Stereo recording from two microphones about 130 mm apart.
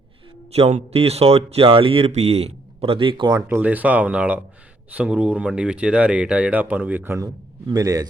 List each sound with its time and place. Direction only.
0.5 s speech: 50° right (ahead or behind)
3.3 s speech: 15° right (ahead or behind)
7.7 s a man's voice: 25° right (ahead or behind)